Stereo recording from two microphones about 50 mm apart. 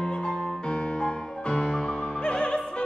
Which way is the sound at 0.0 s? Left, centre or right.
Centre.